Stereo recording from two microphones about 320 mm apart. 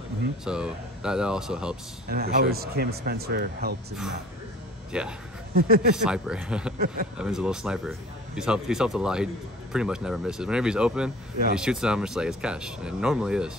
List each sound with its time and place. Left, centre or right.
0.5 s speech: centre
2.0 s speech: right
4.9 s speech: centre
5.5 s speech: right
6.0 s speech: centre